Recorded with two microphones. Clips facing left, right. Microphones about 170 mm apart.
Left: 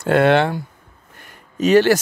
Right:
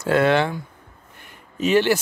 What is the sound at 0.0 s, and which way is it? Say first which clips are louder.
Speech: left 3 dB; 60° left (ahead or behind).